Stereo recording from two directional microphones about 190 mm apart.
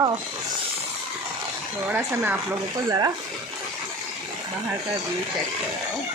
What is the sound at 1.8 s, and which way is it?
A woman's voice, 10° right (ahead or behind).